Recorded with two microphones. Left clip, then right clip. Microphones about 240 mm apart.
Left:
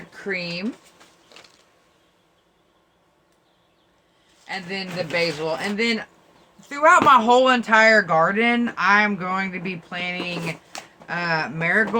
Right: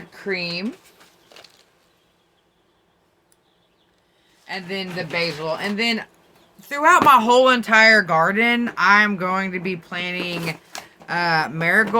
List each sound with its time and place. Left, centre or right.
0.3 s speech: centre
4.4 s speech: centre
6.6 s speech: right
7.3 s speech: centre